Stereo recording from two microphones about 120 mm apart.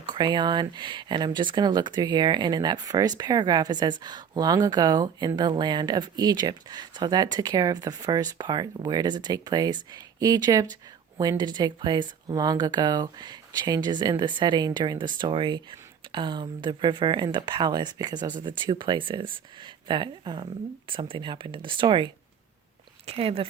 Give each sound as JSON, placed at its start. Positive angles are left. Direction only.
{"t": 0.0, "sound": "speech", "side_deg": -40}
{"t": 23.0, "sound": "speech", "side_deg": -55}